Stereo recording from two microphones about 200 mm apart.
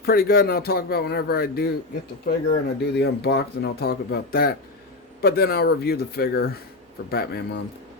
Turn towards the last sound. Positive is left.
turn(degrees=50)  # may be behind; listen again after turning